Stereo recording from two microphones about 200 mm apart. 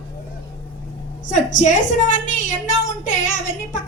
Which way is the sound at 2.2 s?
40° left (ahead or behind).